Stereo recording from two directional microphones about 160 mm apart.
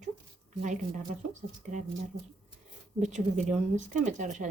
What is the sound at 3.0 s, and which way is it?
Speech, 45° right (ahead or behind).